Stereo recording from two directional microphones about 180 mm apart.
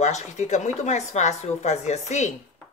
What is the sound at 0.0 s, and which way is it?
Speech, 40° left (ahead or behind).